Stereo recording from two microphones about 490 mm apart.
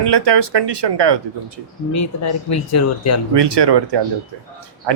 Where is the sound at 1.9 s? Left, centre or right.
Left.